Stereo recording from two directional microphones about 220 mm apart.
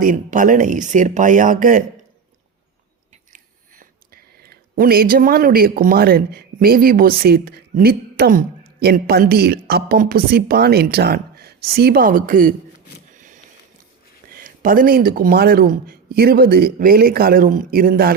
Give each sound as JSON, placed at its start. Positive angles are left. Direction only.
{"t": 0.0, "sound": "speech", "side_deg": -35}
{"t": 3.3, "sound": "speech", "side_deg": -40}
{"t": 13.1, "sound": "a sound", "side_deg": -35}
{"t": 14.3, "sound": "speech", "side_deg": -40}